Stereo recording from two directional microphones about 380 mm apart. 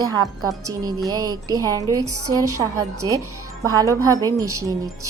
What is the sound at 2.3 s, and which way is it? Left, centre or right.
A woman's voice, centre.